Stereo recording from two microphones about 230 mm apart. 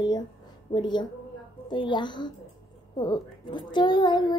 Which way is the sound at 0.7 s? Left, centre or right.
Centre.